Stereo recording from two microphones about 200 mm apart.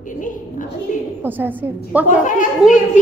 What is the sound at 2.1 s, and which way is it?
Speech, 40° left (ahead or behind).